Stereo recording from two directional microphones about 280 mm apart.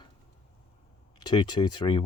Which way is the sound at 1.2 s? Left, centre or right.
Centre.